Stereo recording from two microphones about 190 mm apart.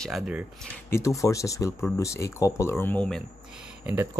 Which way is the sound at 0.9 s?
15° left (ahead or behind).